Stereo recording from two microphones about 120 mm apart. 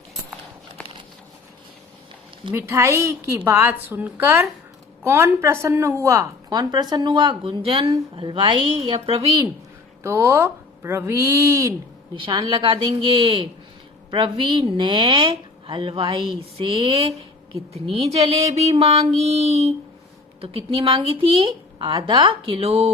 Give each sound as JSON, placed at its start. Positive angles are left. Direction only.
{"t": 2.5, "sound": "a woman's voice", "side_deg": -25}
{"t": 6.5, "sound": "a woman's voice", "side_deg": -35}
{"t": 10.0, "sound": "speech", "side_deg": -20}
{"t": 12.2, "sound": "a woman's voice", "side_deg": -40}
{"t": 17.7, "sound": "a sound", "side_deg": -55}
{"t": 20.4, "sound": "a woman's voice", "side_deg": -50}